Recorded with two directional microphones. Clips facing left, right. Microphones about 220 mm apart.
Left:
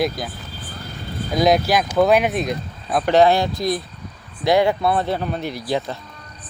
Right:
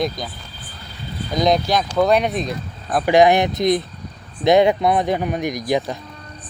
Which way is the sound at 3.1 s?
15° right (ahead or behind).